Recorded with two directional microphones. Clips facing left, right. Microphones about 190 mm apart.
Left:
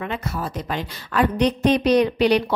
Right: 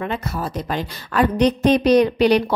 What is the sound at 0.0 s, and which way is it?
A woman's voice, 40° right (ahead or behind).